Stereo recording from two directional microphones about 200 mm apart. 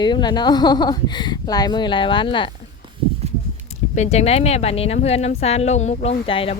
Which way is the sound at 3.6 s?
35° left (ahead or behind).